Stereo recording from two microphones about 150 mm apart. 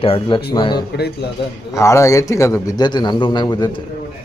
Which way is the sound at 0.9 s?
90° left.